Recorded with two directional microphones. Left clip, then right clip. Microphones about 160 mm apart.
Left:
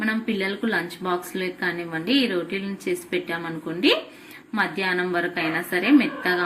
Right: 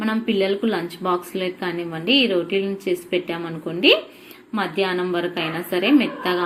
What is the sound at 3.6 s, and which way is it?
A woman's voice, 10° right (ahead or behind).